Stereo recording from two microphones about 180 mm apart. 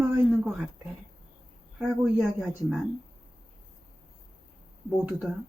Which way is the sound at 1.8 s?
Centre (ahead or behind).